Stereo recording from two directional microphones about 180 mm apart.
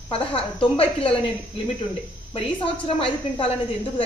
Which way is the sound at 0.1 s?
30° left (ahead or behind).